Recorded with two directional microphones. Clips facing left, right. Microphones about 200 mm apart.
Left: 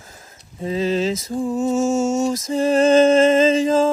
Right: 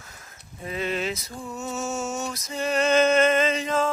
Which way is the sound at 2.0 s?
25° left (ahead or behind).